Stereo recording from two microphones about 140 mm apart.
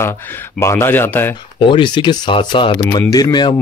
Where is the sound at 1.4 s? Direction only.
35° left (ahead or behind).